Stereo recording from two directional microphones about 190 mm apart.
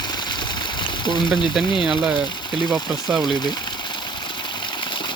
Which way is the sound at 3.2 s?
20° left (ahead or behind).